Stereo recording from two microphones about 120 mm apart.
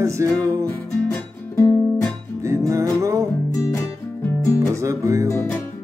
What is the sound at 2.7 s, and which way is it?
Music, 25° right (ahead or behind).